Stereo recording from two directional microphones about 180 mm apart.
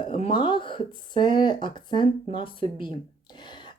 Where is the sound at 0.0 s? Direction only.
30° left (ahead or behind).